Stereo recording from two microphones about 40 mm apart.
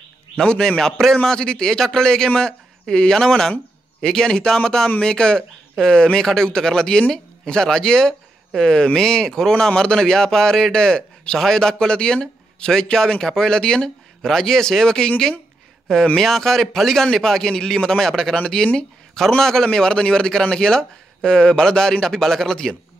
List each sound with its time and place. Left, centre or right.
0.4 s a man's voice: left